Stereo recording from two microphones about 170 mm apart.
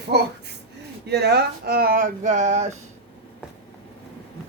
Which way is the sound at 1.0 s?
75° right (ahead or behind).